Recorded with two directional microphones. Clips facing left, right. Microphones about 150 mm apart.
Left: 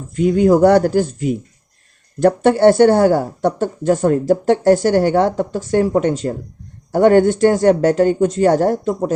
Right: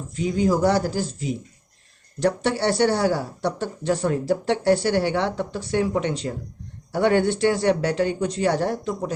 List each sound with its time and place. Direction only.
0.1 s speech: 55° left (ahead or behind)